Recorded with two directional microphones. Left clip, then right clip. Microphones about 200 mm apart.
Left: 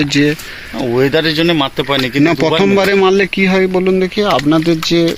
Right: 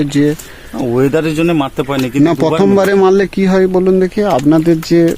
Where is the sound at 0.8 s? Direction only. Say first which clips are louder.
Even; 55° right (ahead or behind).